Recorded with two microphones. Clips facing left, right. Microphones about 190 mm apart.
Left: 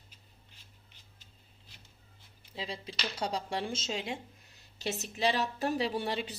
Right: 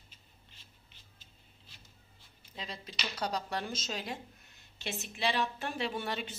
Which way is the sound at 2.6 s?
30° left (ahead or behind).